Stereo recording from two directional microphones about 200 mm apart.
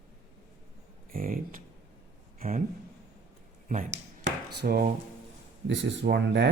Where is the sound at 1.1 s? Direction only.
45° right (ahead or behind).